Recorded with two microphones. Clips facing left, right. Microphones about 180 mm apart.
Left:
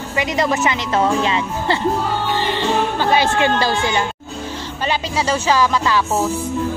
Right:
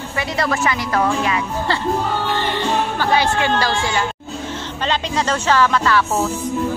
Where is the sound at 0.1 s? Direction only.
20° left (ahead or behind).